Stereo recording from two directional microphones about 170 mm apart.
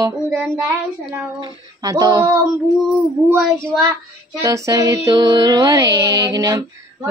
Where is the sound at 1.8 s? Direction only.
20° right (ahead or behind).